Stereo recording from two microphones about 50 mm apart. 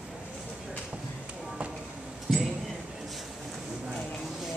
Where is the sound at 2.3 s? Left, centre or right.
Centre.